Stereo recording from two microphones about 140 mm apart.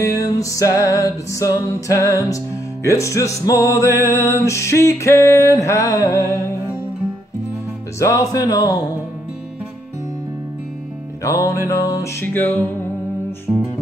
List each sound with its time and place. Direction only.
0.0 s music: 25° left (ahead or behind)
8.0 s music: 25° left (ahead or behind)
11.2 s music: 20° left (ahead or behind)